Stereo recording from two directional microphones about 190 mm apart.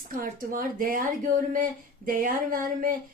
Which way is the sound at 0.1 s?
45° right (ahead or behind).